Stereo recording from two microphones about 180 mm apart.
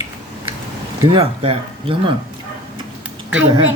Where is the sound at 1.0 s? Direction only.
30° right (ahead or behind).